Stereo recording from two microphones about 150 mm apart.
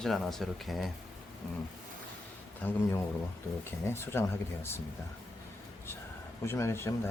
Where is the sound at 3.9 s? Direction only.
15° left (ahead or behind).